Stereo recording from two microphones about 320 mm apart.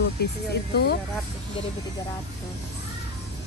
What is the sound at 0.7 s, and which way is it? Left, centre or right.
Speech, left.